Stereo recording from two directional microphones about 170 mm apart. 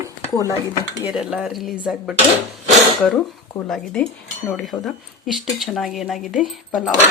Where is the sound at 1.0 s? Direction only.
5° right (ahead or behind).